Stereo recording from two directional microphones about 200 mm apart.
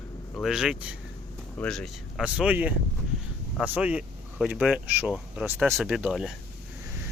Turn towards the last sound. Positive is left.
turn(degrees=-5)  # may be behind; listen again after turning